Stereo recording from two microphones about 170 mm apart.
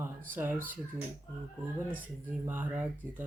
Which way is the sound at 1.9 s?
10° right (ahead or behind).